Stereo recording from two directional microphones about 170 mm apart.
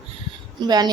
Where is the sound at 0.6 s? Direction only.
25° right (ahead or behind).